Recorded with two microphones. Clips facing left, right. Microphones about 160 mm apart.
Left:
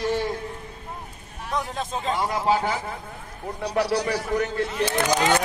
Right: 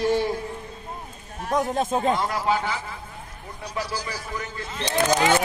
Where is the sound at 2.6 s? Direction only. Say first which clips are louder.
Left 3 dB; 45° left (ahead or behind).